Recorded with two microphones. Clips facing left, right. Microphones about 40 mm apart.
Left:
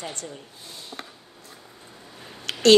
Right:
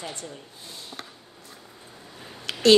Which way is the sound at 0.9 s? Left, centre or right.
Centre.